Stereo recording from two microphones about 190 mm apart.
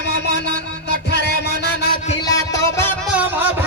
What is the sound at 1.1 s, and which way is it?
Music, 60° left (ahead or behind).